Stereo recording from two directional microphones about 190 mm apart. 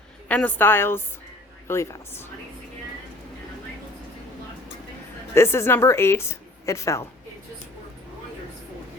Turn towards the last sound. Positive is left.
turn(degrees=15)  # may be behind; listen again after turning